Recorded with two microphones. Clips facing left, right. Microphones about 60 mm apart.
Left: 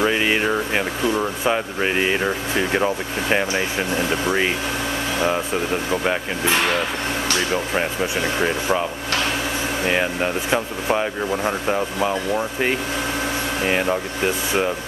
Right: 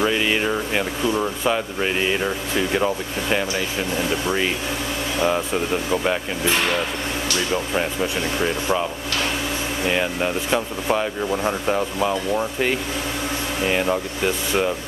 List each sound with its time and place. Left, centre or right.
0.0 s speech: centre
1.5 s speech: centre
5.2 s speech: centre
7.5 s speech: centre
9.8 s speech: centre